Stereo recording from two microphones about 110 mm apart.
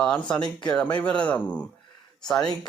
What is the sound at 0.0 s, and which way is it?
Speech, 10° left (ahead or behind).